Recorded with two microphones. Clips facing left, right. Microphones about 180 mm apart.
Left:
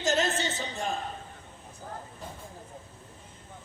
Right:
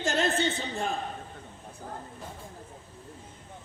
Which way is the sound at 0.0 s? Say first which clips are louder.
Right 1 dB; 60° right (ahead or behind).